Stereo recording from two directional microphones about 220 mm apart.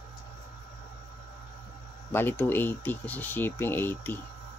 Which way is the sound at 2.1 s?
10° left (ahead or behind).